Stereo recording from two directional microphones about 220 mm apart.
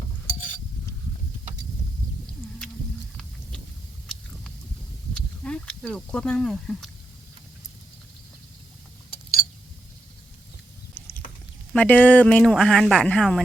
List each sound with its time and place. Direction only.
0.3 s a sound: 35° left (ahead or behind)
5.4 s speech: 5° left (ahead or behind)
11.7 s speech: 5° left (ahead or behind)